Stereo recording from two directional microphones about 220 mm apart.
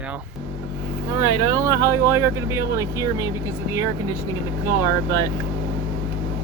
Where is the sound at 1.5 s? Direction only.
15° right (ahead or behind).